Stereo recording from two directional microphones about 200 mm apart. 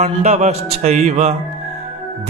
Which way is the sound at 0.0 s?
30° right (ahead or behind).